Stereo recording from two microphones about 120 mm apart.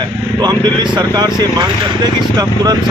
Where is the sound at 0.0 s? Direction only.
35° right (ahead or behind).